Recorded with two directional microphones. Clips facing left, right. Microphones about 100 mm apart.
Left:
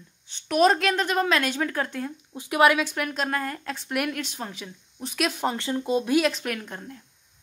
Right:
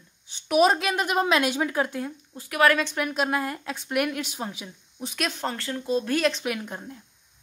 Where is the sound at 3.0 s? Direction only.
10° right (ahead or behind).